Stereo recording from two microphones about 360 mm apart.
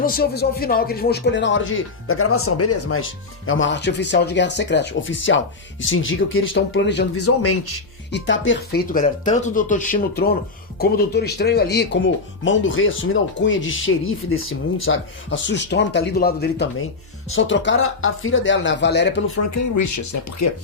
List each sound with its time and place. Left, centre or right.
0.0 s speech: left
19.4 s speech: left